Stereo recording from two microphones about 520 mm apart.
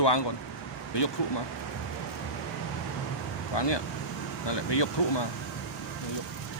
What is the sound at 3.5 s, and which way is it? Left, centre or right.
Speech, left.